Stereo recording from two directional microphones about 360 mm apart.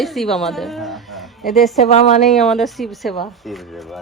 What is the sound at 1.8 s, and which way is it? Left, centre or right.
Speech, centre.